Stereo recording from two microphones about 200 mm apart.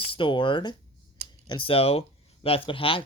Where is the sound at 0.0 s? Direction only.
25° left (ahead or behind).